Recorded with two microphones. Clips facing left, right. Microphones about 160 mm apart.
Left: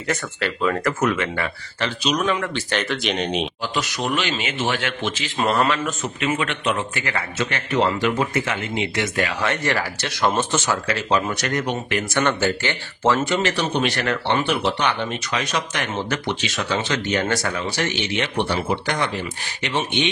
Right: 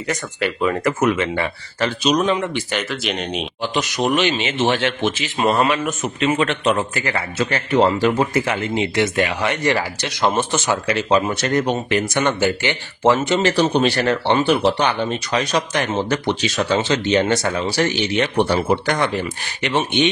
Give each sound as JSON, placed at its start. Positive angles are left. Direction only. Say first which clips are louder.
{"t": 0.1, "sound": "a man's voice", "louder": "right 1 dB", "side_deg": -10}
{"t": 1.8, "sound": "speech", "louder": "right 5 dB", "side_deg": -40}
{"t": 2.2, "sound": "a man's voice", "louder": "right 3 dB", "side_deg": -20}
{"t": 2.7, "sound": "speech", "louder": "even", "side_deg": 0}
{"t": 3.7, "sound": "a man's voice", "louder": "right 6 dB", "side_deg": -20}
{"t": 5.0, "sound": "a man's voice", "louder": "right 1 dB", "side_deg": -15}
{"t": 12.1, "sound": "speech", "louder": "left 2 dB", "side_deg": -15}
{"t": 13.4, "sound": "speech", "louder": "right 5 dB", "side_deg": -35}